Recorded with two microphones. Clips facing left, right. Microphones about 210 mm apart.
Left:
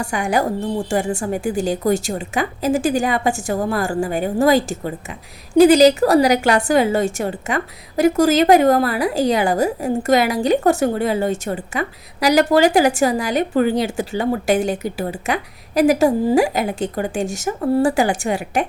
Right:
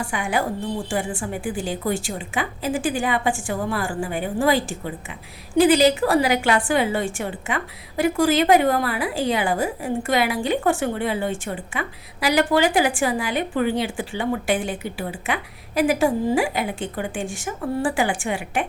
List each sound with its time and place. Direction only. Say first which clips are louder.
0.0 s a woman's voice: left 5 dB; 40° left (ahead or behind)